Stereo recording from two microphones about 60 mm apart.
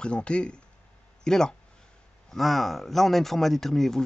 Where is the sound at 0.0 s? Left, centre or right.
Centre.